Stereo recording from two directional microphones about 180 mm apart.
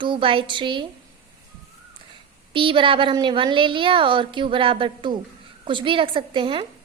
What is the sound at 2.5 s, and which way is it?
A woman's voice, 30° right (ahead or behind).